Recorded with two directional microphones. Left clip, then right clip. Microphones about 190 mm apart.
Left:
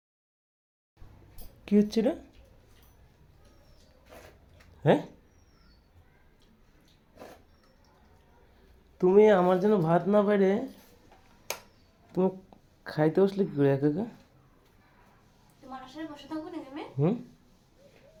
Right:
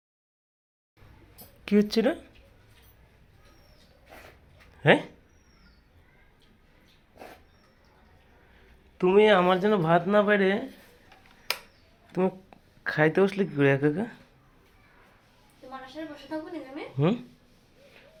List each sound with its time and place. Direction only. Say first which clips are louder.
1.6 s speech: right 2 dB; 5° left (ahead or behind)
4.8 s speech: right 4 dB; 5° left (ahead or behind)
9.0 s speech: right 1 dB; 10° left (ahead or behind)
12.1 s speech: right 1 dB; 15° left (ahead or behind)
17.0 s speech: right 2 dB; centre (ahead or behind)